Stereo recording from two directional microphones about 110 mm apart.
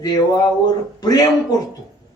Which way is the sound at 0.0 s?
35° left (ahead or behind).